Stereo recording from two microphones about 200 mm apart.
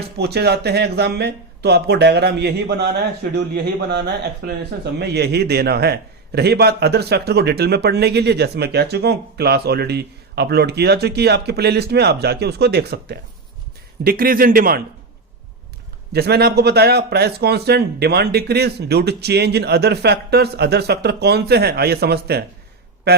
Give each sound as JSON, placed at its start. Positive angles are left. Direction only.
{"t": 0.2, "sound": "a man's voice", "side_deg": -55}
{"t": 16.1, "sound": "speech", "side_deg": -55}